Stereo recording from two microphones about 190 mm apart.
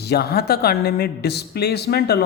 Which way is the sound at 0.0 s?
55° left (ahead or behind).